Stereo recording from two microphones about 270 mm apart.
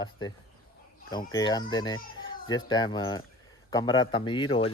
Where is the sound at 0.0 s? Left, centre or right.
Centre.